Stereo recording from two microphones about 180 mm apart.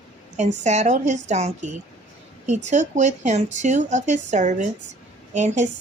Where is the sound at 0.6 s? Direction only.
40° right (ahead or behind).